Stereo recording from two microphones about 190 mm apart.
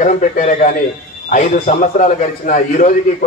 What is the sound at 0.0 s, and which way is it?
A man's voice, 40° left (ahead or behind).